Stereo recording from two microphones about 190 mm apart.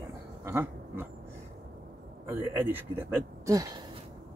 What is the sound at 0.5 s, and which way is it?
Dog, 10° right (ahead or behind).